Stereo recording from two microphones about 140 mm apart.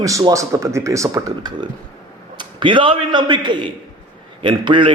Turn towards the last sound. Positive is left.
turn(degrees=-35)  # may be behind; listen again after turning